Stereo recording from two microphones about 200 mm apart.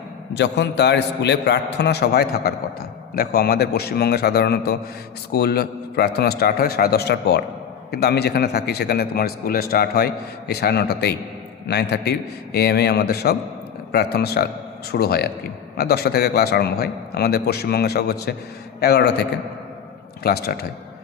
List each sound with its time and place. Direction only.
0.3 s a man's voice: 60° left (ahead or behind)
20.2 s a man's voice: 50° left (ahead or behind)